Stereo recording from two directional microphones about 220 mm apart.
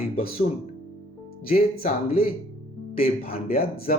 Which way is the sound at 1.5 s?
40° left (ahead or behind).